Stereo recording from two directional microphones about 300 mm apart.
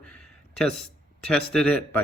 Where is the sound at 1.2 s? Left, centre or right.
Centre.